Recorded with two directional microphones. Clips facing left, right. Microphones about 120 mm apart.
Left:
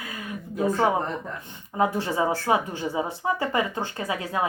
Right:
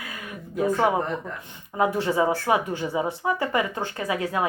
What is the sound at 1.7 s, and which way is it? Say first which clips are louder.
Speech: right 2 dB; 30° left (ahead or behind).